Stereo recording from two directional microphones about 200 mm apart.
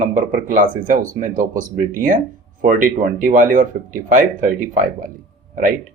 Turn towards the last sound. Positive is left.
turn(degrees=-40)  # may be behind; listen again after turning